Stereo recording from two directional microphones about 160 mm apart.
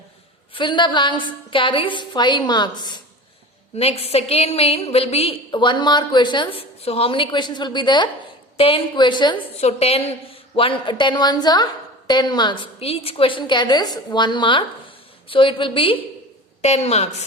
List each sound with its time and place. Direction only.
0.5 s a woman's voice: 30° left (ahead or behind)
3.8 s a woman's voice: 40° left (ahead or behind)
9.6 s a woman's voice: 40° left (ahead or behind)